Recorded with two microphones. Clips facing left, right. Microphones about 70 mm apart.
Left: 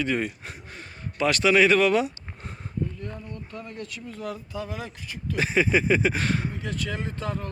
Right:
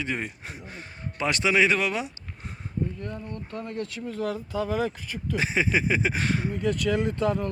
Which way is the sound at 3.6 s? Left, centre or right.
Right.